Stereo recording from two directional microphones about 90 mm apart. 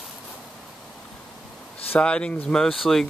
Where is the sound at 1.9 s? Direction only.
10° left (ahead or behind).